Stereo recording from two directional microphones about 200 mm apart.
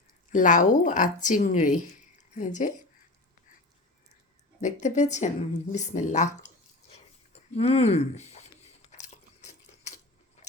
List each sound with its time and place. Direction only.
0.3 s speech: 40° left (ahead or behind)
4.6 s speech: 35° left (ahead or behind)
6.4 s chewing: 35° left (ahead or behind)
8.9 s a sound: 35° left (ahead or behind)